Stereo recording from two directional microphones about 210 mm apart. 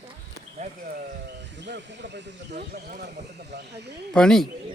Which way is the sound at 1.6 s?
55° right (ahead or behind).